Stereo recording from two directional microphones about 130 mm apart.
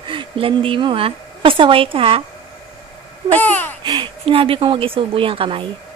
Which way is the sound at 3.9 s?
40° right (ahead or behind).